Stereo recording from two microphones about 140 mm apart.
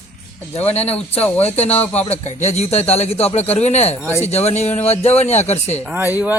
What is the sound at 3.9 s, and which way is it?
Speech, 10° left (ahead or behind).